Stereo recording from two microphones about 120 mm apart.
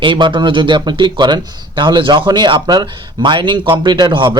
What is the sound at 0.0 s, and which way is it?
A man's voice, 40° right (ahead or behind).